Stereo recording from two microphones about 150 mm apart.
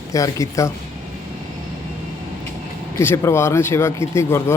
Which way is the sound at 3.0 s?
15° left (ahead or behind).